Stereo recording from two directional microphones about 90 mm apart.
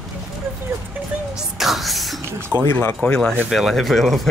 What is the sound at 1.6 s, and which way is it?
Speech, centre (ahead or behind).